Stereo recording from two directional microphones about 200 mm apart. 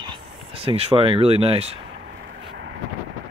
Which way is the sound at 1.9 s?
55° right (ahead or behind).